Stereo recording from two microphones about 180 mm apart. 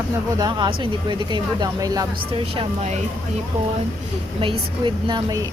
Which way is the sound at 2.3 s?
30° right (ahead or behind).